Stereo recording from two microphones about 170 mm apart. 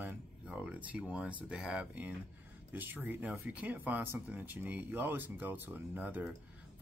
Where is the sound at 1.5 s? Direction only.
5° right (ahead or behind).